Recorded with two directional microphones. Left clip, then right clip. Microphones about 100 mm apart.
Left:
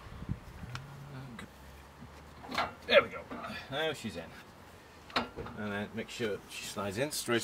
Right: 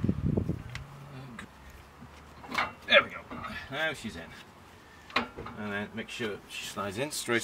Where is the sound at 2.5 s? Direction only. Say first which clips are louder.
Right 3 dB; centre (ahead or behind).